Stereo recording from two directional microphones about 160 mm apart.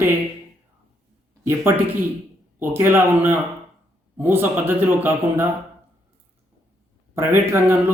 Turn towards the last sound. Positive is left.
turn(degrees=-15)  # may be behind; listen again after turning